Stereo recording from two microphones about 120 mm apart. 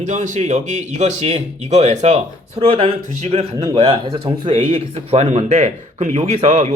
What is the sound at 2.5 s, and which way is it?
Speech, 50° right (ahead or behind).